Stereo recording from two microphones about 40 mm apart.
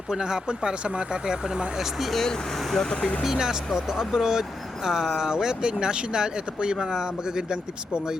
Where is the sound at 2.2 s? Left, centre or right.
Centre.